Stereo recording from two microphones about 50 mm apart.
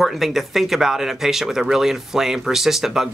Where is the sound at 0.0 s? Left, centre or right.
Centre.